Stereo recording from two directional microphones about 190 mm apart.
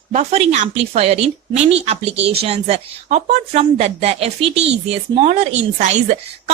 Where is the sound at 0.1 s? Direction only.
35° right (ahead or behind).